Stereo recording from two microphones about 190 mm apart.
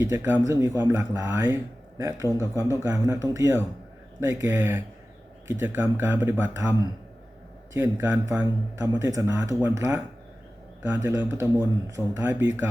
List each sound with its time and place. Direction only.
0.0 s a man's voice: 15° right (ahead or behind)